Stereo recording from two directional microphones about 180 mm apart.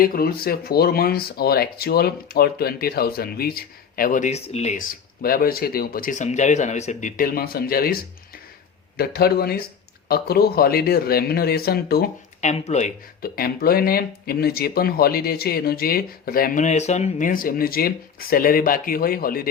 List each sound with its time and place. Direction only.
0.0 s speech: 55° left (ahead or behind)
12.4 s speech: 40° left (ahead or behind)
13.2 s speech: 55° left (ahead or behind)